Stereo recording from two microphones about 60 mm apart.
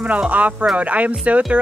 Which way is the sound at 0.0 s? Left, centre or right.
Right.